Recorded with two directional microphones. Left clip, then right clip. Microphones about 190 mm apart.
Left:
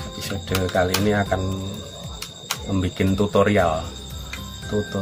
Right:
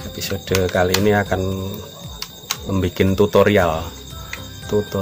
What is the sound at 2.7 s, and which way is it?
Speech, 55° right (ahead or behind).